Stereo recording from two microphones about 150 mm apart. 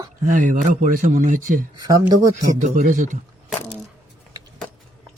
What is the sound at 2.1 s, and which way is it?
Speech, 25° right (ahead or behind).